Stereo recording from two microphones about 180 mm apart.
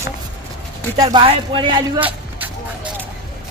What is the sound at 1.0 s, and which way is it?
Speech, 25° right (ahead or behind).